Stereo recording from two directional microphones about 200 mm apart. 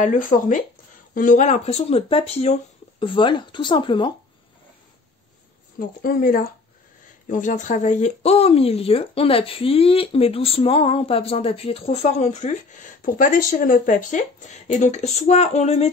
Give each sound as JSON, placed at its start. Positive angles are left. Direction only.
{"t": 0.0, "sound": "speech", "side_deg": 40}
{"t": 5.8, "sound": "speech", "side_deg": 45}